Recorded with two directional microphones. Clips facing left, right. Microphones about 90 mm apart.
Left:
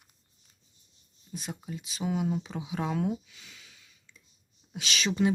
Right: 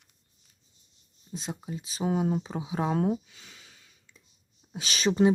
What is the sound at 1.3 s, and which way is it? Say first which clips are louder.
Speech: right 2 dB; 25° right (ahead or behind).